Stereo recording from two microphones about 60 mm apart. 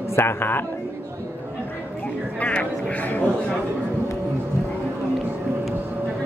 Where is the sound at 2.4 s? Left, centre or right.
Left.